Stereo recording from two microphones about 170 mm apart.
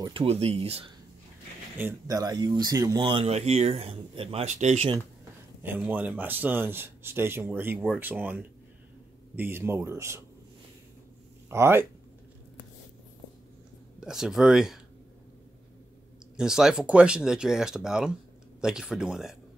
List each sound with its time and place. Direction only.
0.0 s speech: 30° right (ahead or behind)
1.8 s speech: 15° right (ahead or behind); by 4.8 s 45° right (ahead or behind)
5.6 s speech: 10° right (ahead or behind)
11.5 s speech: 15° right (ahead or behind)
13.9 s speech: 5° right (ahead or behind)
16.3 s speech: 5° right (ahead or behind)